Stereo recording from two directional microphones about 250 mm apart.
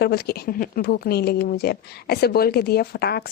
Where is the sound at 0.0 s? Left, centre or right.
Left.